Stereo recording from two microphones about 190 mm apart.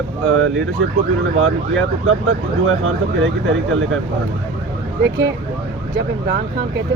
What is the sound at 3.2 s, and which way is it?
Speech, 90° right.